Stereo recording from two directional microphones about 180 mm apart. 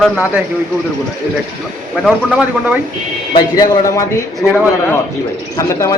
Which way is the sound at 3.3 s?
20° left (ahead or behind).